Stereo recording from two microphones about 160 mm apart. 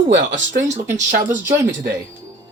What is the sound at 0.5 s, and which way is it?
Speech, 60° right (ahead or behind).